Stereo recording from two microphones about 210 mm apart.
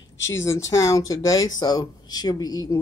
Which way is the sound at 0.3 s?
15° left (ahead or behind).